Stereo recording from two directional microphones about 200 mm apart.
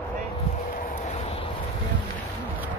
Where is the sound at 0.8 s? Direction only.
40° left (ahead or behind).